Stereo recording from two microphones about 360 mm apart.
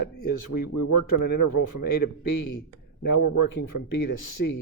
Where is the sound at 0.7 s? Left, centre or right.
Left.